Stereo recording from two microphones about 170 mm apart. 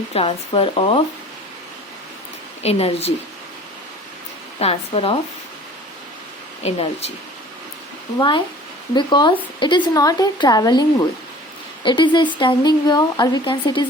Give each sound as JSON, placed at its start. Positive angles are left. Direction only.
{"t": 0.1, "sound": "speech", "side_deg": 35}
{"t": 2.6, "sound": "speech", "side_deg": 35}
{"t": 4.6, "sound": "speech", "side_deg": 35}
{"t": 6.6, "sound": "speech", "side_deg": 40}
{"t": 9.0, "sound": "speech", "side_deg": 25}